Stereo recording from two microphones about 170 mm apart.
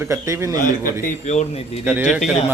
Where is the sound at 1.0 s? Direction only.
45° left (ahead or behind).